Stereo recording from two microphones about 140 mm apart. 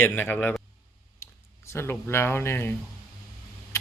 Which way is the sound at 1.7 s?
15° left (ahead or behind).